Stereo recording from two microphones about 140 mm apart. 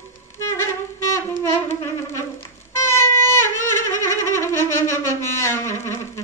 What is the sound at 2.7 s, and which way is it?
Wind instrument, 20° left (ahead or behind).